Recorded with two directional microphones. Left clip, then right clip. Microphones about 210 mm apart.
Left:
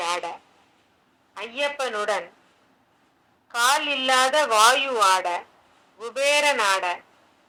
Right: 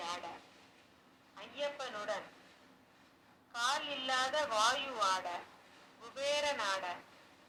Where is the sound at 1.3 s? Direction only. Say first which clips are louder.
Left 14 dB; 55° left (ahead or behind).